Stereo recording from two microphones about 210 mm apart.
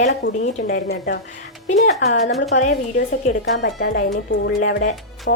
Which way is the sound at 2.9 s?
45° left (ahead or behind).